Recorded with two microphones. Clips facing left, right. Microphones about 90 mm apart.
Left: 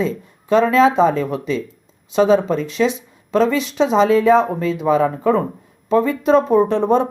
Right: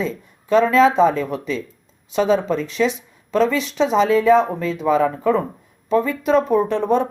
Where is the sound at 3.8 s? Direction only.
25° left (ahead or behind).